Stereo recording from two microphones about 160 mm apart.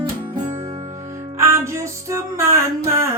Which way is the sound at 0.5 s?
40° right (ahead or behind).